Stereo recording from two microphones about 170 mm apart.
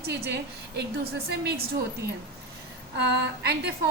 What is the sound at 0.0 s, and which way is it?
Speech, 75° right (ahead or behind).